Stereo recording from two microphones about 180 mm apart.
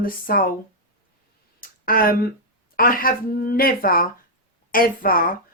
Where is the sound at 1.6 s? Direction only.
55° left (ahead or behind).